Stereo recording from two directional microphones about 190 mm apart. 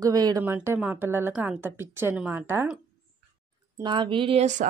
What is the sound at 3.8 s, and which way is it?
Speech, 25° right (ahead or behind).